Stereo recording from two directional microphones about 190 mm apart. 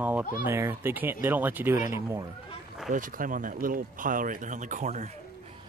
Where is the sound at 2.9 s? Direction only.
45° right (ahead or behind).